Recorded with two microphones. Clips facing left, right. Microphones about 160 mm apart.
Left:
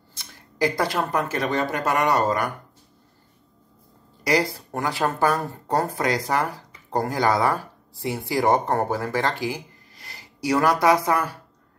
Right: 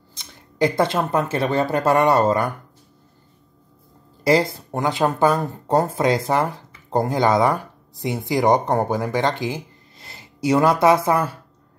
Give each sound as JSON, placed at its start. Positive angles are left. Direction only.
{"t": 0.1, "sound": "speech", "side_deg": -20}
{"t": 4.2, "sound": "speech", "side_deg": -25}